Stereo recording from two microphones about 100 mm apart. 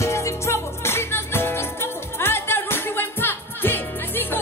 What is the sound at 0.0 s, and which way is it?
Music, 30° left (ahead or behind).